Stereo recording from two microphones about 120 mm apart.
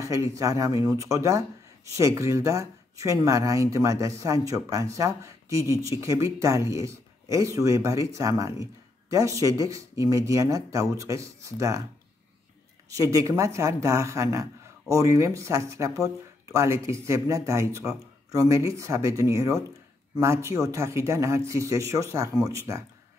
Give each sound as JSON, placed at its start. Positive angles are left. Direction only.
{"t": 0.0, "sound": "a woman's voice", "side_deg": -25}
{"t": 12.9, "sound": "a woman's voice", "side_deg": -25}